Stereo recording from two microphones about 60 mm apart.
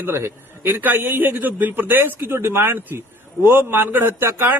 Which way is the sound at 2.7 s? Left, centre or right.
Right.